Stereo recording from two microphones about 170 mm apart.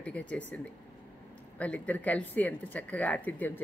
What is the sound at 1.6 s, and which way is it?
Speech, 10° left (ahead or behind).